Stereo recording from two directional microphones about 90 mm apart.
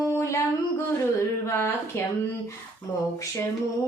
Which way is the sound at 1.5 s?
30° left (ahead or behind).